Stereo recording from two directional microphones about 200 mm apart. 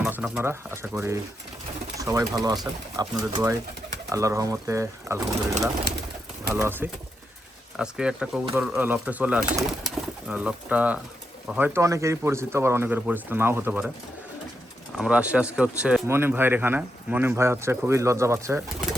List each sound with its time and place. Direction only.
0.0 s speech: 5° right (ahead or behind)
6.5 s speech: 10° right (ahead or behind)
14.9 s speech: 5° right (ahead or behind)